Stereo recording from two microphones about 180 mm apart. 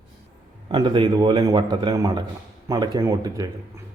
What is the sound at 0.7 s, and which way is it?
A man's voice, 25° right (ahead or behind).